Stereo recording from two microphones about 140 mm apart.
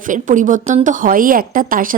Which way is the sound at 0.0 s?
65° right (ahead or behind).